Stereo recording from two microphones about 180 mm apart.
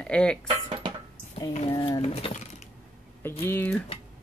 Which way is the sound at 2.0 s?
35° left (ahead or behind).